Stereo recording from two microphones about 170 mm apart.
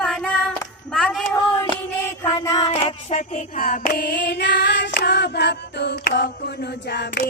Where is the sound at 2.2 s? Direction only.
20° left (ahead or behind).